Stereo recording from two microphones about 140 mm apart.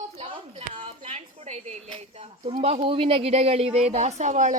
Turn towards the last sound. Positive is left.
turn(degrees=-60)  # may be behind; listen again after turning